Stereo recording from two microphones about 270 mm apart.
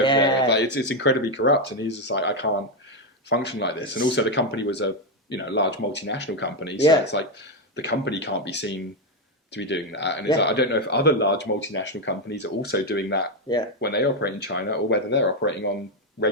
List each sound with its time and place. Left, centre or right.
0.0 s a sound: centre
0.4 s speech: left
13.5 s speech: centre
13.8 s speech: left